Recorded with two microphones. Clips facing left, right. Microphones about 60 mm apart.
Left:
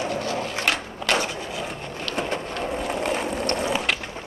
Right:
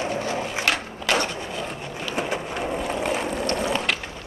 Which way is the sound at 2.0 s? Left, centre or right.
Centre.